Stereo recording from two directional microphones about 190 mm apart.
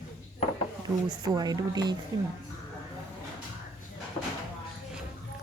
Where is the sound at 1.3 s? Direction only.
20° right (ahead or behind).